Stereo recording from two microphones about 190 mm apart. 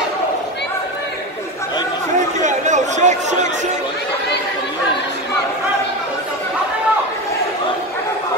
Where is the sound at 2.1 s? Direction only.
40° right (ahead or behind).